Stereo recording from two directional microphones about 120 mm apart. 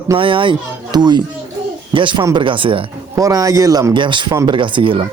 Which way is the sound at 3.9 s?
40° right (ahead or behind).